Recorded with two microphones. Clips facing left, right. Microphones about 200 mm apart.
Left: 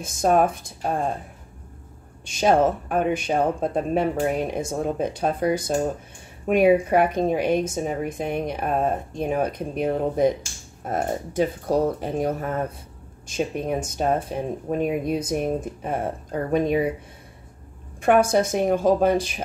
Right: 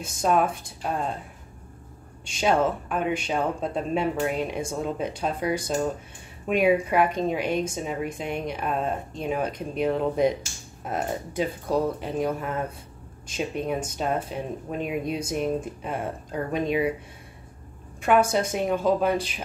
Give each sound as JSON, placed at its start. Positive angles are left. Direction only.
{"t": 0.0, "sound": "a woman's voice", "side_deg": 50}
{"t": 2.4, "sound": "a woman's voice", "side_deg": 50}
{"t": 18.3, "sound": "a woman's voice", "side_deg": 45}